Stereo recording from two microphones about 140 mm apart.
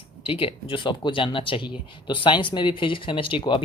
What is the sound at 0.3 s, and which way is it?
Speech, 40° left (ahead or behind).